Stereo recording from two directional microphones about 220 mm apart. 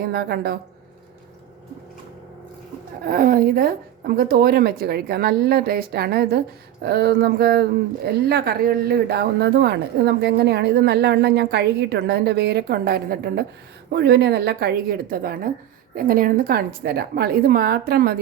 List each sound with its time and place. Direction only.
0.1 s speech: 45° right (ahead or behind)
3.1 s speech: 40° right (ahead or behind)